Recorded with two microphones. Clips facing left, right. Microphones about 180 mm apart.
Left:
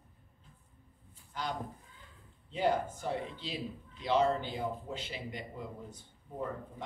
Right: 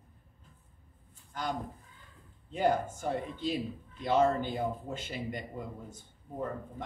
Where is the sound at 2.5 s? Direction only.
50° right (ahead or behind).